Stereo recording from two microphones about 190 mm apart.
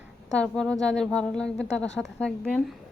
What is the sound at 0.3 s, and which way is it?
A woman's voice, 5° left (ahead or behind).